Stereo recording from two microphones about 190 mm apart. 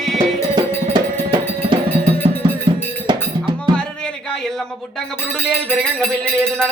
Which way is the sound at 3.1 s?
25° right (ahead or behind).